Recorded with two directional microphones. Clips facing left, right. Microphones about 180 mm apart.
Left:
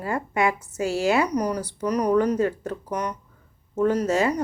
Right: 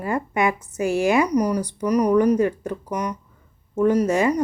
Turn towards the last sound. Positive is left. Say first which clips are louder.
# right 3 dB
turn(degrees=-15)  # may be behind; listen again after turning